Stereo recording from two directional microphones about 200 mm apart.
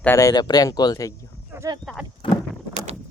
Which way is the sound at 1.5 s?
15° right (ahead or behind).